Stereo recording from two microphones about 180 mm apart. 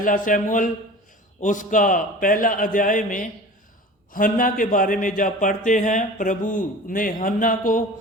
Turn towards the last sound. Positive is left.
turn(degrees=50)  # may be behind; listen again after turning